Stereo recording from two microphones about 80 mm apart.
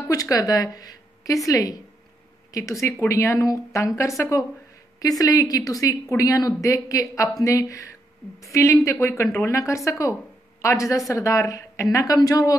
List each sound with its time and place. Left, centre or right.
0.1 s a woman's voice: left